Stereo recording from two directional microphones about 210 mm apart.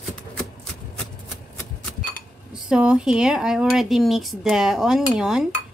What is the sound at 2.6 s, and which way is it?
Speech, 5° right (ahead or behind).